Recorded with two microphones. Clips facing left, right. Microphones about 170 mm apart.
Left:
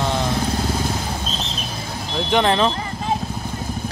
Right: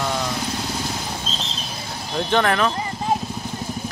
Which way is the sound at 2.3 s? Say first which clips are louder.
Left 2 dB; 20° left (ahead or behind).